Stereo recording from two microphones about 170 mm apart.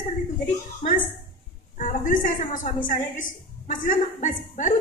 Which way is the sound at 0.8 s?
45° left (ahead or behind).